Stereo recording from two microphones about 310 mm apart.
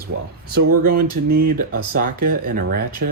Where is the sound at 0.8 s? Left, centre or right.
Right.